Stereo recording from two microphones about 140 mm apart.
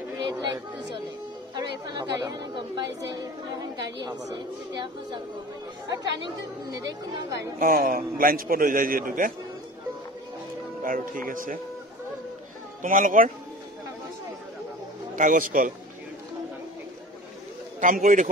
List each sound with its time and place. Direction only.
0.2 s a woman's voice: 35° right (ahead or behind)
5.9 s a woman's voice: 30° right (ahead or behind)
7.5 s a man's voice: 90° right
10.8 s speech: 80° right
12.8 s a man's voice: 70° right (ahead or behind)
15.1 s a man's voice: 70° right (ahead or behind)
17.7 s a man's voice: 70° right (ahead or behind)